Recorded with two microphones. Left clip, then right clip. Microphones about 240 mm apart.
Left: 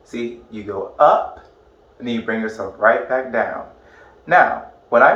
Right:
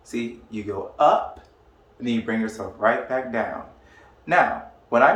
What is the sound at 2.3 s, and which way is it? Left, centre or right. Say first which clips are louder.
Speech: left 5 dB; right.